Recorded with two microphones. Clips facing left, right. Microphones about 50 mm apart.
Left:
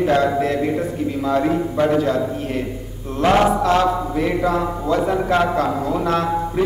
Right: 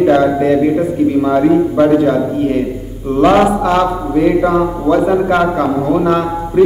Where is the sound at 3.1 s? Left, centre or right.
Right.